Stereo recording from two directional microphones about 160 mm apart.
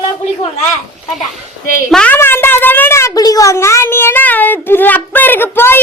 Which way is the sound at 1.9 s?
10° left (ahead or behind).